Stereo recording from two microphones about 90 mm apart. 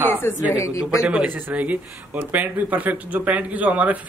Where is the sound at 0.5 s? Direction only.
40° left (ahead or behind).